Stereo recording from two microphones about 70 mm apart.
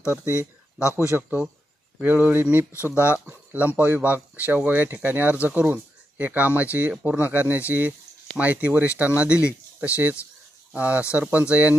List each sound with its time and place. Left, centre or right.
0.1 s speech: right